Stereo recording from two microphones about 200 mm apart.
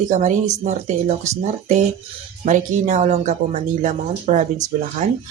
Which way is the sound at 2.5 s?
40° right (ahead or behind).